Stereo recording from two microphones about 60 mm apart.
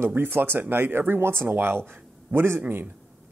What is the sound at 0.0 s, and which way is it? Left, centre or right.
Speech, right.